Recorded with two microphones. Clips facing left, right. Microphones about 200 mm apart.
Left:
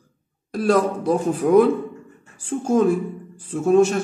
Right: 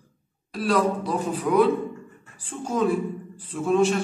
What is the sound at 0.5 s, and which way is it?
A man's voice, 50° left (ahead or behind).